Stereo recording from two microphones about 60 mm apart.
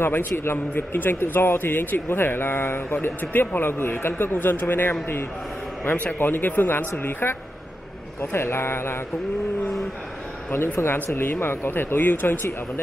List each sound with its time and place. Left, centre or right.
0.0 s speech: left
6.1 s speech: left
11.1 s speech: left